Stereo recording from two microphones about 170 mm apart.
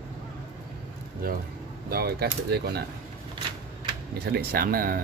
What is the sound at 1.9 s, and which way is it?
Speech, 65° right (ahead or behind).